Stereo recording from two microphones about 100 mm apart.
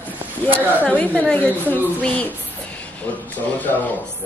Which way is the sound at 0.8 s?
15° left (ahead or behind).